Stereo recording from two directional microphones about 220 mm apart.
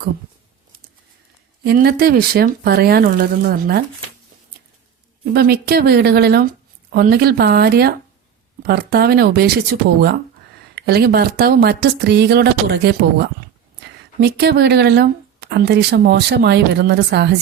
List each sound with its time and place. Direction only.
1.6 s speech: 45° right (ahead or behind)
5.2 s speech: 45° right (ahead or behind)